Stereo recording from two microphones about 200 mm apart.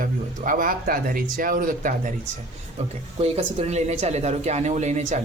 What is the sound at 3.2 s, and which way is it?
Speech, 30° right (ahead or behind).